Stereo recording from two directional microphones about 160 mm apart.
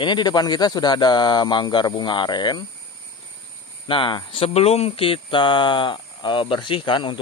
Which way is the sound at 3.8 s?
30° left (ahead or behind).